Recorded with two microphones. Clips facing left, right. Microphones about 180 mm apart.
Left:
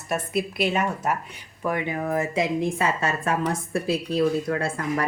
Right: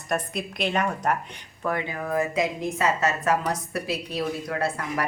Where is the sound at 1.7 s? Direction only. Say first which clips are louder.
Left 2 dB; 20° left (ahead or behind).